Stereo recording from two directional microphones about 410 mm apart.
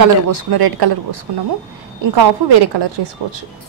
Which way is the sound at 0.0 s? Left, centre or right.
Right.